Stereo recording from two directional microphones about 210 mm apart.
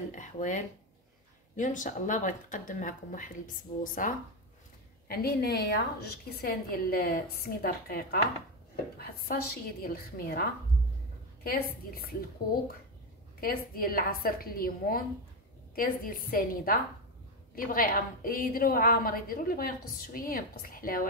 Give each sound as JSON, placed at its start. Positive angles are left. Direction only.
{"t": 0.1, "sound": "a woman's voice", "side_deg": 35}
{"t": 11.4, "sound": "a woman's voice", "side_deg": 45}
{"t": 13.4, "sound": "a woman's voice", "side_deg": 45}